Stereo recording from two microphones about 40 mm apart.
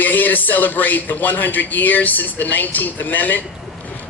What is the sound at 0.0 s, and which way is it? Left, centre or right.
Speech, left.